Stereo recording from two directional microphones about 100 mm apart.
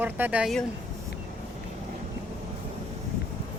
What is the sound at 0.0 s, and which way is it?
Speech, 15° right (ahead or behind).